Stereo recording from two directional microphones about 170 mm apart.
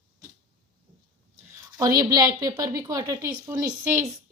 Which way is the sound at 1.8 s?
20° right (ahead or behind).